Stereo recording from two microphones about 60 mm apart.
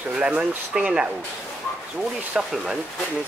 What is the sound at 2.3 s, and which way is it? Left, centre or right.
Speech, centre.